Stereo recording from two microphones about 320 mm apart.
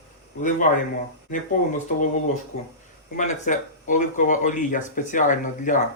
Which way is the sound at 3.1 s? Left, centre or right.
Left.